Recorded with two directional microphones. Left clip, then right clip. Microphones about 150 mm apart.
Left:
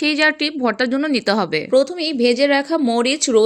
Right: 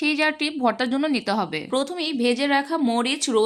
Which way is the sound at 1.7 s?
10° left (ahead or behind).